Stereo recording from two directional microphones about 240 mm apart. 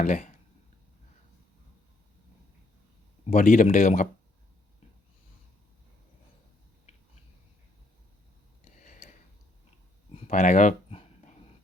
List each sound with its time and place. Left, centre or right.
0.0 s speech: left
3.2 s speech: left
8.8 s a sound: left